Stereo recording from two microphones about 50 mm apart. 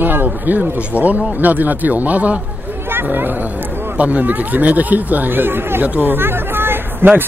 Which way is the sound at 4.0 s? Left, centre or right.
Right.